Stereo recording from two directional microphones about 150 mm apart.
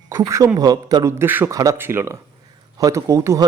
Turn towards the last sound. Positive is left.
turn(degrees=-20)  # may be behind; listen again after turning